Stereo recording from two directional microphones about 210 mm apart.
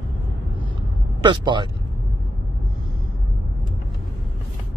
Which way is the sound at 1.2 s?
20° right (ahead or behind).